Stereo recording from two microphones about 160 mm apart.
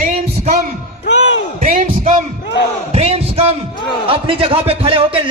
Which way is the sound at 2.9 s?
40° right (ahead or behind).